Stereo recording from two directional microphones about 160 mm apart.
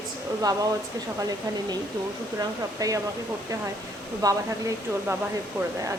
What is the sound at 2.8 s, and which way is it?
Speech, 20° right (ahead or behind).